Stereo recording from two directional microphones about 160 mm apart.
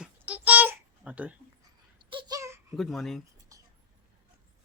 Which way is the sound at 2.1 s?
25° right (ahead or behind).